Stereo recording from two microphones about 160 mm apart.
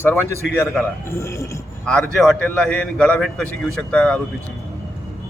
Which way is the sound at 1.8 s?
5° left (ahead or behind).